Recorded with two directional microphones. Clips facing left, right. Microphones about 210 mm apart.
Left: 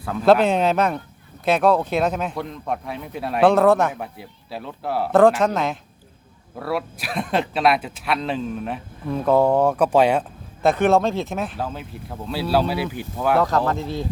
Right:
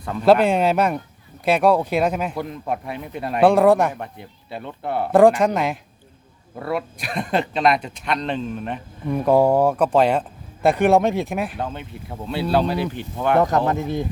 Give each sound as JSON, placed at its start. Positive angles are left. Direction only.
{"t": 0.0, "sound": "speech", "side_deg": 0}
{"t": 3.4, "sound": "speech", "side_deg": -10}
{"t": 3.9, "sound": "speech", "side_deg": 5}
{"t": 5.4, "sound": "speech", "side_deg": -15}
{"t": 6.6, "sound": "speech", "side_deg": 0}
{"t": 9.1, "sound": "speech", "side_deg": -10}
{"t": 11.5, "sound": "speech", "side_deg": 0}
{"t": 13.4, "sound": "speech", "side_deg": -20}